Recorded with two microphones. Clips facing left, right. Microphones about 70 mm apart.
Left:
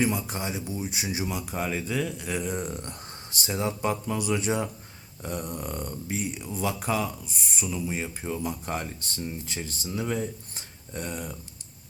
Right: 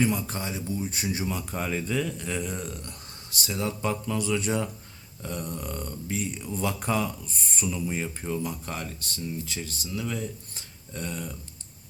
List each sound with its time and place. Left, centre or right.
0.2 s speech: centre
2.6 s speech: left
6.4 s speech: centre
8.6 s speech: left